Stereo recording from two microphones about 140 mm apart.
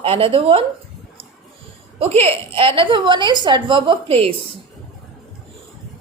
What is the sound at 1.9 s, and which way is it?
A woman's voice, 45° right (ahead or behind).